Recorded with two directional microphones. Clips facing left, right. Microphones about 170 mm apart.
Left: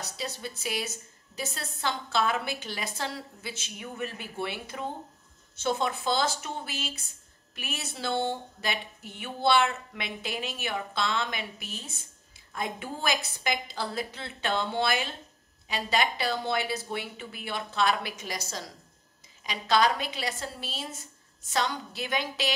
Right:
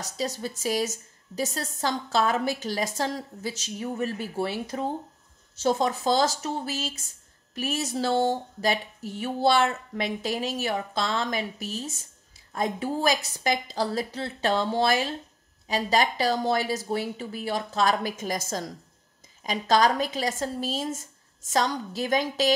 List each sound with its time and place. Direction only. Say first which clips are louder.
0.0 s a woman's voice: right 6 dB; 40° right (ahead or behind)